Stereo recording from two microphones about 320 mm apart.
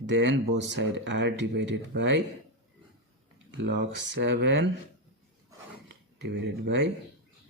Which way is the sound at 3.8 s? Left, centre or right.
Right.